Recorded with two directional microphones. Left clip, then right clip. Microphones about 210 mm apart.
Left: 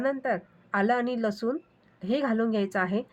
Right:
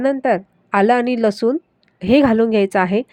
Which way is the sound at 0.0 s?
35° right (ahead or behind).